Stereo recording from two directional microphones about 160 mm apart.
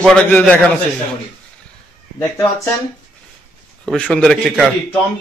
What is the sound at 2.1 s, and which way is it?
Speech, 15° left (ahead or behind).